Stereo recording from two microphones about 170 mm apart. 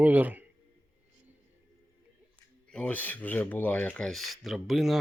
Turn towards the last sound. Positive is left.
turn(degrees=0)  # may be behind; listen again after turning